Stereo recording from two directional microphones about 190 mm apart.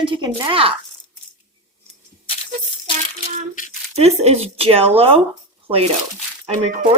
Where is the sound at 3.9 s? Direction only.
35° right (ahead or behind).